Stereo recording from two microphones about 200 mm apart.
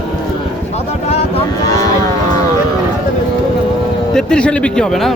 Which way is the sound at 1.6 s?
15° left (ahead or behind).